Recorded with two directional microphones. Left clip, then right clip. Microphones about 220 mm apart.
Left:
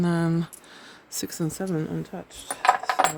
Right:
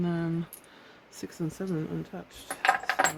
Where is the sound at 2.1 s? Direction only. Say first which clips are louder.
Left 4 dB; 40° left (ahead or behind).